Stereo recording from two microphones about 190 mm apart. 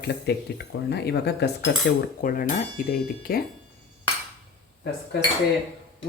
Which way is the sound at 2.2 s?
45° left (ahead or behind).